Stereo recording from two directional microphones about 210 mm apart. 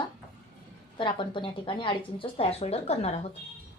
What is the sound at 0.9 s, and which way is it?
A woman's voice, 25° left (ahead or behind).